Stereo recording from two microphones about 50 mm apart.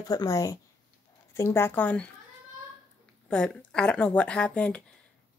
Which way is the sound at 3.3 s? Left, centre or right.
Centre.